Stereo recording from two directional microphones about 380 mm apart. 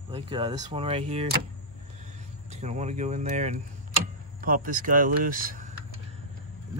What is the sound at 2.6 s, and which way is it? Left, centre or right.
Speech, centre.